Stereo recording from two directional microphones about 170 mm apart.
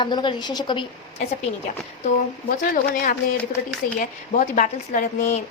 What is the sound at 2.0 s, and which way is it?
A woman's voice, 55° left (ahead or behind).